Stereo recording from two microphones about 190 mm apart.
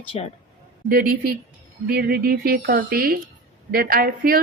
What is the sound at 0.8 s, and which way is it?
A woman's voice, 50° right (ahead or behind).